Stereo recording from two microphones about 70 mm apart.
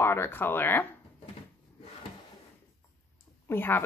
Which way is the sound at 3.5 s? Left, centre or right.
Left.